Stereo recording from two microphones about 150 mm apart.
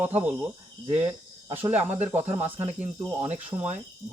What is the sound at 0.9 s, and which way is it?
Speech, 45° right (ahead or behind).